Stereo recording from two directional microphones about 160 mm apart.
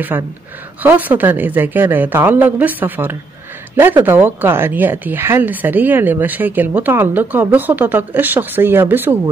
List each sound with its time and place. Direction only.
0.1 s speech: 20° right (ahead or behind)